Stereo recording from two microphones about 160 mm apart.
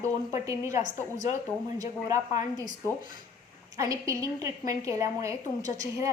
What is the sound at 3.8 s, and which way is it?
A woman's voice, 20° right (ahead or behind).